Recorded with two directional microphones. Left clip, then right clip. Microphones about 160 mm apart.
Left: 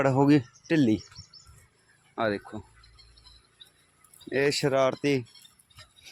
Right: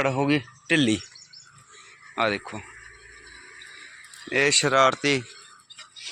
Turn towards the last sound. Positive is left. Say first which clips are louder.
# right 5 dB
turn(degrees=20)  # may be behind; listen again after turning